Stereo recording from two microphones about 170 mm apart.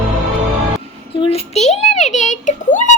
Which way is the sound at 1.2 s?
40° left (ahead or behind).